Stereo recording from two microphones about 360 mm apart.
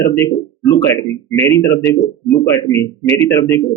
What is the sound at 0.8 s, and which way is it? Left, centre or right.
A man's voice, centre.